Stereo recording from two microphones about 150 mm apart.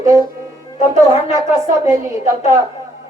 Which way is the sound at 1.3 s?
20° right (ahead or behind).